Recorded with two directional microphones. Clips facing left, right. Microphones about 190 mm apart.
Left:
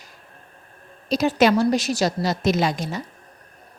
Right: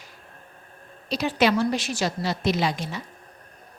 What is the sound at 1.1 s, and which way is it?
A woman's voice, 45° left (ahead or behind).